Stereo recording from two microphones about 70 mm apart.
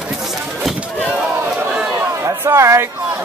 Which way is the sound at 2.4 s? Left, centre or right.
Right.